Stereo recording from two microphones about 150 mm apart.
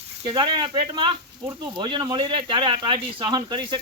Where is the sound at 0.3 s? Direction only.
30° right (ahead or behind).